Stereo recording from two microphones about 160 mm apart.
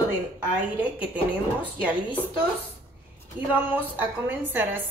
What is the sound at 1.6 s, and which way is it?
Speech, 10° right (ahead or behind).